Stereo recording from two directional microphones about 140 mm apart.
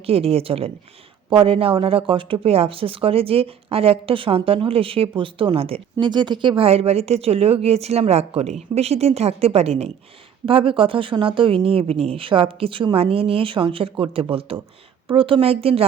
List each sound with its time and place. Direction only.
0.0 s speech: 45° right (ahead or behind)